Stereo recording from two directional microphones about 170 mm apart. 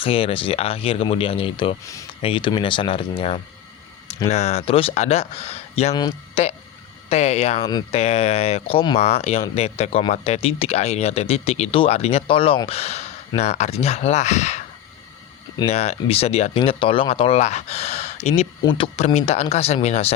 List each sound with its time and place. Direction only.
0.0 s speech: 35° left (ahead or behind)
1.8 s speech: 20° left (ahead or behind)
2.2 s speech: 30° left (ahead or behind)
5.9 s speech: 25° left (ahead or behind)
6.3 s speech: 40° left (ahead or behind)
7.7 s speech: 25° left (ahead or behind)
7.9 s speech: 40° left (ahead or behind)
15.6 s speech: 40° left (ahead or behind)
18.6 s speech: 30° left (ahead or behind)
18.9 s speech: 40° left (ahead or behind)